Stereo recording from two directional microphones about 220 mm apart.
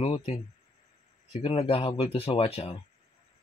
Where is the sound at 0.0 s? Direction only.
25° left (ahead or behind).